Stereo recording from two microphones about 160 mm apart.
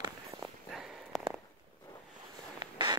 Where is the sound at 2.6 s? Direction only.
25° right (ahead or behind).